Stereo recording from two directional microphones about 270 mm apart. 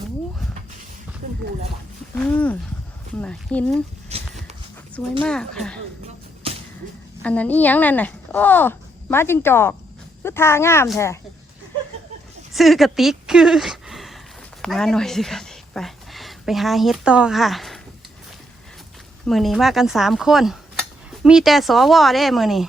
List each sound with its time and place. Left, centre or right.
2.1 s speech: centre
4.1 s a sound: right
5.2 s speech: centre
7.2 s speech: centre
12.5 s speech: centre
19.2 s speech: centre